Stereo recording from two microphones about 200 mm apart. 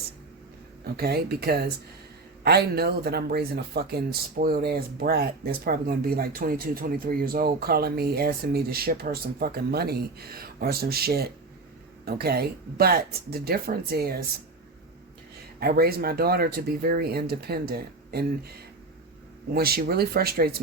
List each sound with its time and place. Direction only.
0.9 s speech: 50° right (ahead or behind)
15.6 s speech: 50° right (ahead or behind)